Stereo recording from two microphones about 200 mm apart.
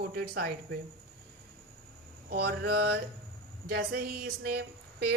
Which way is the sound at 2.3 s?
50° right (ahead or behind).